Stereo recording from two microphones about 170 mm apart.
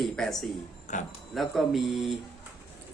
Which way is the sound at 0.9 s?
45° left (ahead or behind).